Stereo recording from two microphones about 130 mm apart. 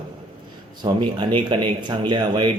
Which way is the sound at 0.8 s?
40° right (ahead or behind).